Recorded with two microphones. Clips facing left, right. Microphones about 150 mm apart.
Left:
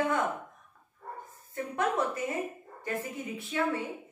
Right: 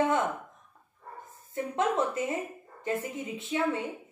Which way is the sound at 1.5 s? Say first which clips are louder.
Right 2 dB; 25° right (ahead or behind).